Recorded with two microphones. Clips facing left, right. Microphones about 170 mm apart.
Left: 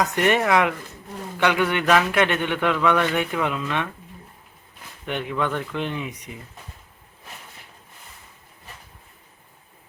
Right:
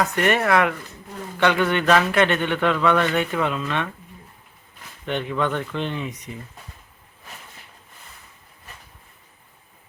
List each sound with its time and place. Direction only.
0.0 s a man's voice: 20° left (ahead or behind)
5.0 s a man's voice: 10° left (ahead or behind)